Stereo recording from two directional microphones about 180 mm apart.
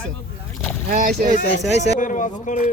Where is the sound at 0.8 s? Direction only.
50° right (ahead or behind).